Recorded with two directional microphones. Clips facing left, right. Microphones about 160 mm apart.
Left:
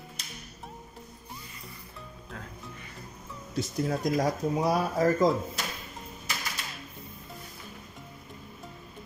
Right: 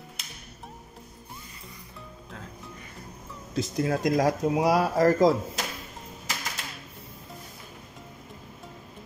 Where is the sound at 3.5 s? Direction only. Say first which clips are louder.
Right 3 dB; 90° right.